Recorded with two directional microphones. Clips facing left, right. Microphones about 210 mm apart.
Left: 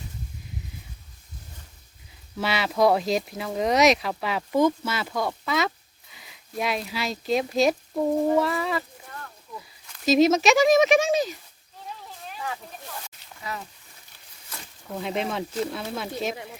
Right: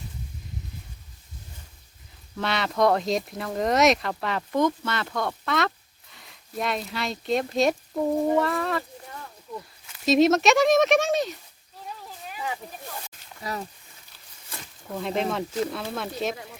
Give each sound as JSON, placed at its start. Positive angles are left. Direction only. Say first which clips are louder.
{"t": 2.3, "sound": "speech", "louder": "left 1 dB", "side_deg": 5}
{"t": 13.5, "sound": "speech", "louder": "right 3 dB", "side_deg": -35}
{"t": 14.9, "sound": "speech", "louder": "right 1 dB", "side_deg": 0}